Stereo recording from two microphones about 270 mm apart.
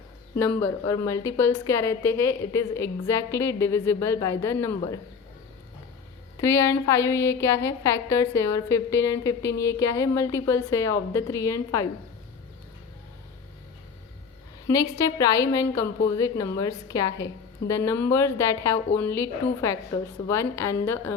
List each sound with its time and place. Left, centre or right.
0.3 s a woman's voice: centre
6.4 s a woman's voice: centre
14.7 s a woman's voice: centre